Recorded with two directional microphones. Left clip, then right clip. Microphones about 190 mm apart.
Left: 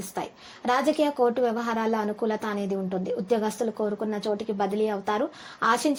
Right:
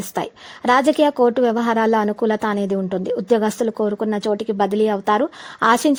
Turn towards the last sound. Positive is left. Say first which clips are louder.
# right 8 dB
turn(degrees=-45)  # may be behind; listen again after turning